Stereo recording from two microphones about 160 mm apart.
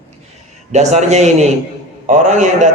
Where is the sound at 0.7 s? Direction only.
45° right (ahead or behind).